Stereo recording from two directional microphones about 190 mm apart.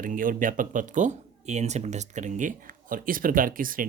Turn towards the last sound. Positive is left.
turn(degrees=-45)  # may be behind; listen again after turning